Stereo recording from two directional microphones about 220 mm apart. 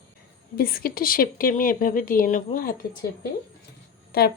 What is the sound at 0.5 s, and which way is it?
Speech, 40° left (ahead or behind).